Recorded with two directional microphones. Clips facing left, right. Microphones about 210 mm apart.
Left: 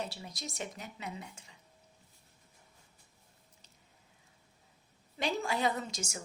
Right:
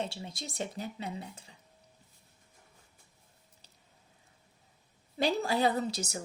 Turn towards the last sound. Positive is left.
turn(degrees=-35)  # may be behind; listen again after turning